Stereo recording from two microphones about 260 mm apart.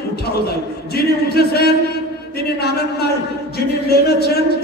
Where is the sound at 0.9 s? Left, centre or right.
Left.